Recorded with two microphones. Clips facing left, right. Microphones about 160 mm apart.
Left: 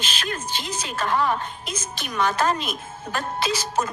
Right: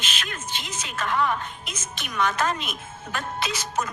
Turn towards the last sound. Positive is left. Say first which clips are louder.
# left 4 dB
turn(degrees=30)  # may be behind; listen again after turning